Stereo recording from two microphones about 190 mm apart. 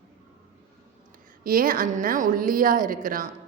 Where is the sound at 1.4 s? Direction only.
45° right (ahead or behind).